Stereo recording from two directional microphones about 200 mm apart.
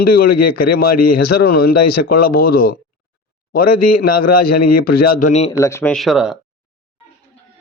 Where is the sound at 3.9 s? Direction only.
50° left (ahead or behind).